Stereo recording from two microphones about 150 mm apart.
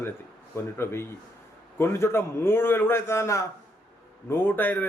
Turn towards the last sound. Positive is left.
turn(degrees=10)  # may be behind; listen again after turning